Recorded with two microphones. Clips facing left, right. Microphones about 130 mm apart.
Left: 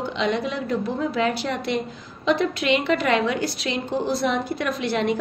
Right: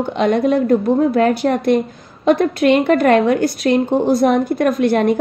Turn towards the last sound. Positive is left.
turn(degrees=-50)  # may be behind; listen again after turning